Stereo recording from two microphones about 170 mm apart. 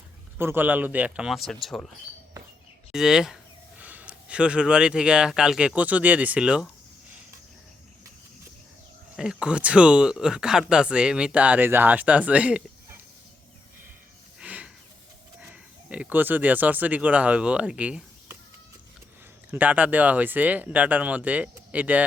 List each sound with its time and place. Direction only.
0.3 s speech: 15° right (ahead or behind)
2.9 s speech: 5° right (ahead or behind)
9.1 s speech: 5° right (ahead or behind)
14.3 s a sound: 5° right (ahead or behind)
15.4 s speech: 5° right (ahead or behind)
19.5 s speech: 10° right (ahead or behind)